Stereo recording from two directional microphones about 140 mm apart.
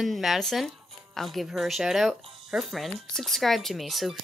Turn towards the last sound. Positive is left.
turn(degrees=0)  # may be behind; listen again after turning